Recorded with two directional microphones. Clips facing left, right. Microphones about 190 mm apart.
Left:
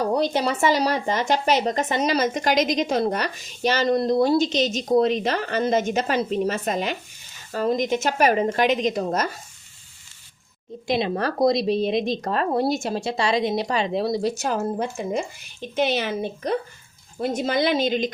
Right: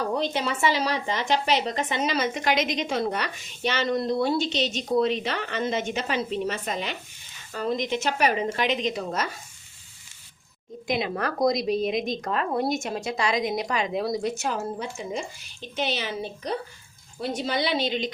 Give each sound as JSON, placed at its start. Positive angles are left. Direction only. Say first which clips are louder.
{"t": 0.1, "sound": "speech", "louder": "left 5 dB", "side_deg": 40}
{"t": 10.8, "sound": "speech", "louder": "left 4 dB", "side_deg": 30}